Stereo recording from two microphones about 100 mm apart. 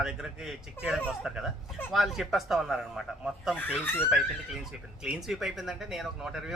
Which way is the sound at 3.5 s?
20° left (ahead or behind).